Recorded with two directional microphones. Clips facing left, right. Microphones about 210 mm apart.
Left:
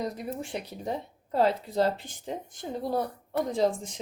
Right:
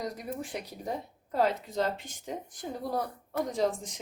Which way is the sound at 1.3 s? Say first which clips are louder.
Left 3 dB; 30° left (ahead or behind).